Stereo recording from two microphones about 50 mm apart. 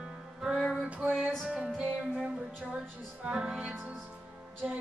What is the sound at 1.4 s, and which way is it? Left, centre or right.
Music, centre.